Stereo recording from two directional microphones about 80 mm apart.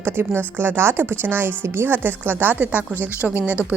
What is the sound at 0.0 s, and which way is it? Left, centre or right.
A woman's voice, right.